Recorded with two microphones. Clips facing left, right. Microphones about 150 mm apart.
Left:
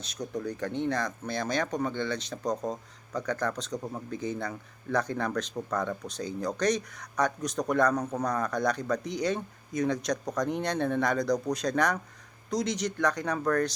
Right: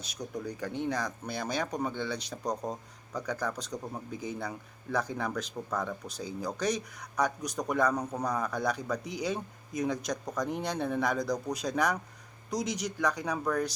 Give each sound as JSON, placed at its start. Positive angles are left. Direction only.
{"t": 0.4, "sound": "a man's voice", "side_deg": -10}